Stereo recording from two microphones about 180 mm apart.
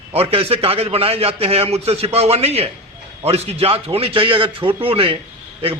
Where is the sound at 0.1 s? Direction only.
30° right (ahead or behind).